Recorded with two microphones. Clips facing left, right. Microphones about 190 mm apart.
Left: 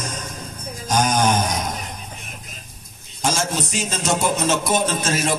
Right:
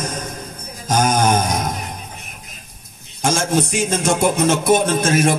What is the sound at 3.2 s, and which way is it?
Speech, 55° right (ahead or behind).